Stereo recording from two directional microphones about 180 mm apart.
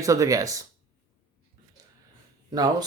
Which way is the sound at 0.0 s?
20° right (ahead or behind).